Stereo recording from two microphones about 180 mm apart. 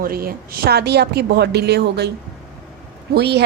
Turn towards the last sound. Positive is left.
turn(degrees=-65)  # may be behind; listen again after turning